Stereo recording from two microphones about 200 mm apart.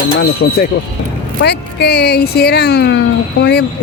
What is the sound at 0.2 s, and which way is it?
Speech, 50° left (ahead or behind).